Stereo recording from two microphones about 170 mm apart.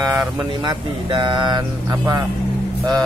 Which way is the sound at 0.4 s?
25° right (ahead or behind).